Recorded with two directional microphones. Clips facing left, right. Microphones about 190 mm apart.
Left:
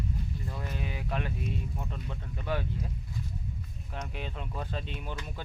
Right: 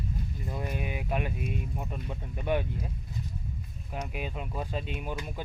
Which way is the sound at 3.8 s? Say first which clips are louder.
Right 3 dB; 10° right (ahead or behind).